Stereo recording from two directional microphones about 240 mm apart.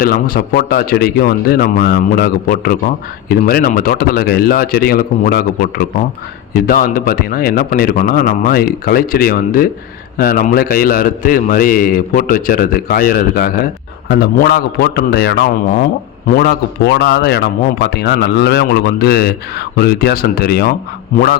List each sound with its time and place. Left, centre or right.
0.0 s a man's voice: left